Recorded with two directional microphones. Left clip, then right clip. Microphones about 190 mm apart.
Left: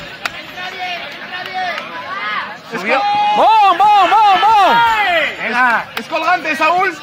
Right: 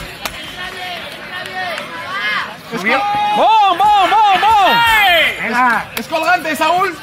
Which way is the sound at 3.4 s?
10° left (ahead or behind).